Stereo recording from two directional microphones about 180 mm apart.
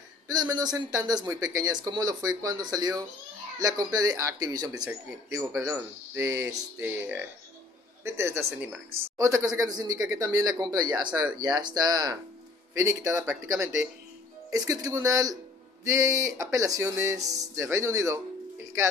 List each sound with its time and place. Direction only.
0.3 s speech: 20° right (ahead or behind)